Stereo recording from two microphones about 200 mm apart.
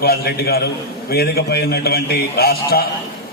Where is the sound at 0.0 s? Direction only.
50° left (ahead or behind).